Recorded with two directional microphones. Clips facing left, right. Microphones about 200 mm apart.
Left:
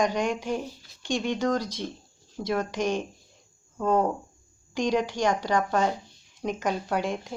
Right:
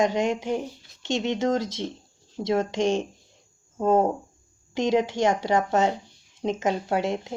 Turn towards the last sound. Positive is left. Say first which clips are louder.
# right 3 dB
turn(degrees=-25)  # may be behind; listen again after turning